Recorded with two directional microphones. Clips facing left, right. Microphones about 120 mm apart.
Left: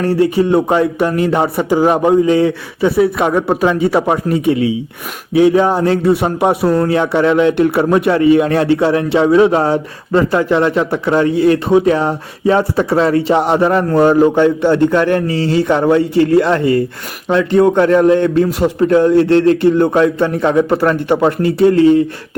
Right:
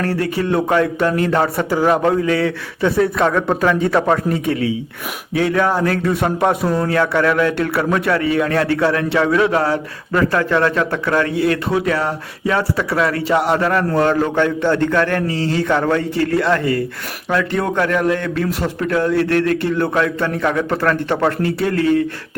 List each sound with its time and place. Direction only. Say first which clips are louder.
0.0 s a man's voice: left 7 dB; 15° left (ahead or behind)
2.8 s a man's voice: left 3 dB; 10° left (ahead or behind); by 22.0 s 25° left (ahead or behind)